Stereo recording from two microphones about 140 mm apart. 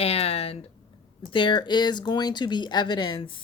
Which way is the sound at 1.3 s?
35° left (ahead or behind).